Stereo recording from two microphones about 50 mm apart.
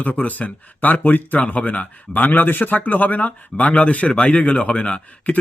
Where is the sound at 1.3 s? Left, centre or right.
Left.